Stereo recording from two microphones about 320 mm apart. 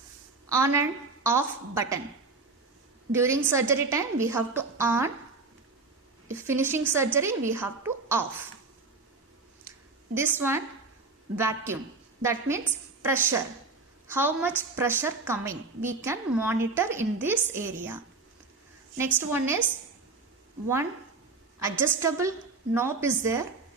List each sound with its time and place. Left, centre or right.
0.4 s a woman's voice: centre
3.1 s a woman's voice: centre
6.2 s a woman's voice: centre
10.2 s a woman's voice: centre
18.9 s a woman's voice: centre
21.6 s a woman's voice: centre